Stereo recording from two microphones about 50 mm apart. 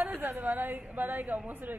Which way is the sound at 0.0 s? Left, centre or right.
Right.